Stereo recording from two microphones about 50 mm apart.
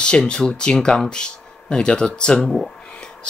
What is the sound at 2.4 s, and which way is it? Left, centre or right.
Speech, centre.